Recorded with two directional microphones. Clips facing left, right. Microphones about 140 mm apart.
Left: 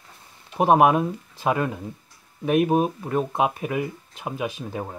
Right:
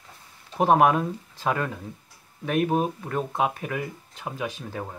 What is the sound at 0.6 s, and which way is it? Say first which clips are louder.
Speech: left 2 dB; 15° left (ahead or behind).